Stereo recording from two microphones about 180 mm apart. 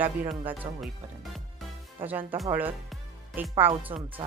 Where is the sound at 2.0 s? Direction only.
10° right (ahead or behind).